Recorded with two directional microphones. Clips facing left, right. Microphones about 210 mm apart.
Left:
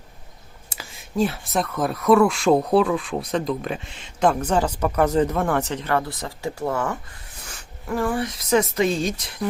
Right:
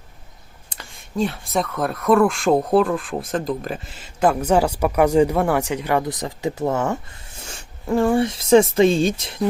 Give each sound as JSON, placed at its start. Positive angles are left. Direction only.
{"t": 0.7, "sound": "speech", "side_deg": 5}